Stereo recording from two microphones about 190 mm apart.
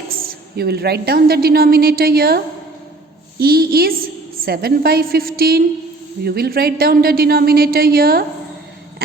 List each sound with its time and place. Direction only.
0.3 s a woman's voice: 55° right (ahead or behind)